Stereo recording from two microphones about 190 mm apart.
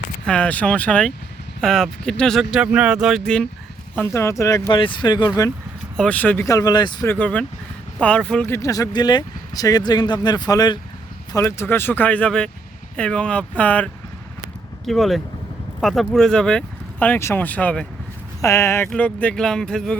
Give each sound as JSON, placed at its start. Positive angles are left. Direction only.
{"t": 0.3, "sound": "speech", "side_deg": 5}
{"t": 3.9, "sound": "speech", "side_deg": 15}
{"t": 6.0, "sound": "speech", "side_deg": 10}
{"t": 7.1, "sound": "speech", "side_deg": 5}